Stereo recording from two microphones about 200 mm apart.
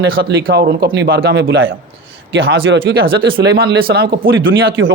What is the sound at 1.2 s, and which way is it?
A man's voice, 65° right (ahead or behind).